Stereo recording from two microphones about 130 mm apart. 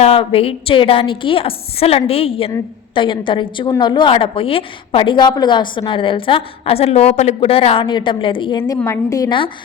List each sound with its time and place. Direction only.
0.0 s a woman's voice: 45° left (ahead or behind)
8.8 s a woman's voice: 25° left (ahead or behind)